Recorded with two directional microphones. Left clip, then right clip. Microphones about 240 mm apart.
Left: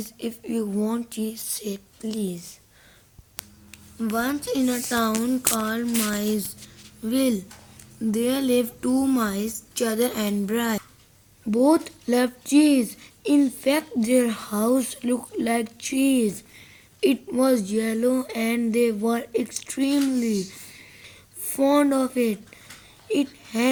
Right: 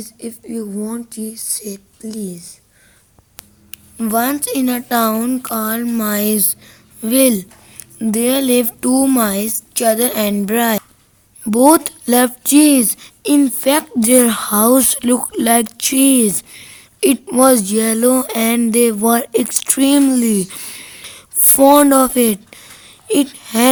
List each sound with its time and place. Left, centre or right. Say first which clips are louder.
0.2 s speech: right 2 dB; centre
3.7 s speech: right 9 dB; right